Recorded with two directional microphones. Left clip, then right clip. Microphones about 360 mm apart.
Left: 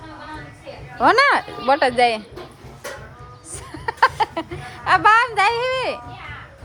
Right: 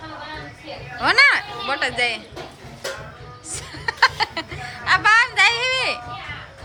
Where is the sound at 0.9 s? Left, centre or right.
Centre.